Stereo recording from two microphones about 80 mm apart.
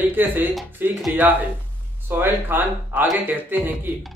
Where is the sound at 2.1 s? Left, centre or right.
Right.